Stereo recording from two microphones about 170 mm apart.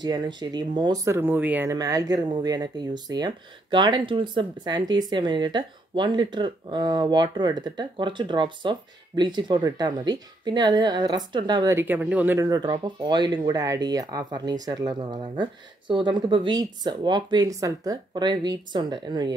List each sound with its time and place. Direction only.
0.0 s speech: 25° right (ahead or behind); by 12.4 s 10° right (ahead or behind)
12.4 s speech: 25° right (ahead or behind)